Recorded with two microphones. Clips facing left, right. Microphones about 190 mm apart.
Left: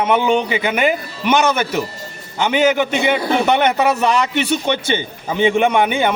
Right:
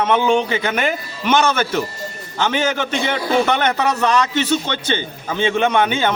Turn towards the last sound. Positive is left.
turn(degrees=15)  # may be behind; listen again after turning